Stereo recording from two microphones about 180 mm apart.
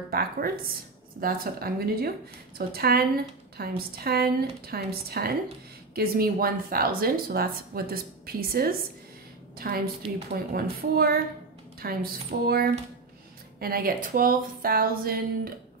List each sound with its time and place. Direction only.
0.1 s speech: 55° right (ahead or behind)